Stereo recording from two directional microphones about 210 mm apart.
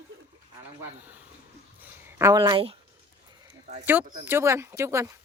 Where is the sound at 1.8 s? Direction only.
10° right (ahead or behind).